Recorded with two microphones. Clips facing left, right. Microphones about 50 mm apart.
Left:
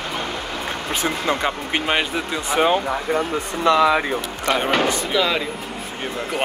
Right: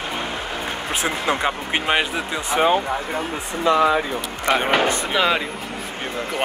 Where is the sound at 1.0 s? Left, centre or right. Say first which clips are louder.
Even; centre.